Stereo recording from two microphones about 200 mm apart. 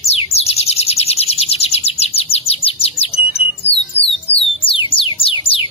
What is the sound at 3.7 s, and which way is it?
Music, 60° left (ahead or behind).